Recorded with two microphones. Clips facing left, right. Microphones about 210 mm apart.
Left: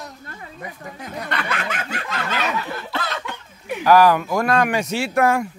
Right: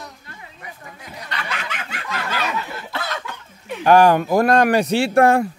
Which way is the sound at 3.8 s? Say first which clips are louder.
Right 1 dB; 25° right (ahead or behind).